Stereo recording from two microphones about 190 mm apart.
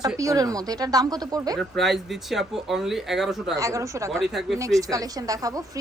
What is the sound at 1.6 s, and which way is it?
Speech, centre (ahead or behind).